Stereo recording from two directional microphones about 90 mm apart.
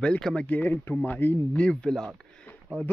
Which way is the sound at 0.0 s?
10° left (ahead or behind).